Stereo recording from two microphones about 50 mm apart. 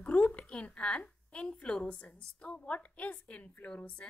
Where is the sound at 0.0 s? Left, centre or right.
Left.